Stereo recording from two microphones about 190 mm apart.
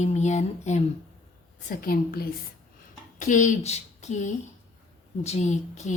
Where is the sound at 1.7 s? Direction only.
50° left (ahead or behind).